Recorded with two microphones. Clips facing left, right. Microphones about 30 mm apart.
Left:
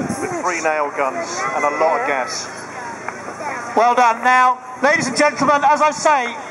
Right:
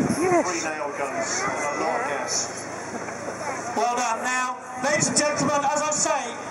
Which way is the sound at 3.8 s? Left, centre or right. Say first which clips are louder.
Left 11 dB; left.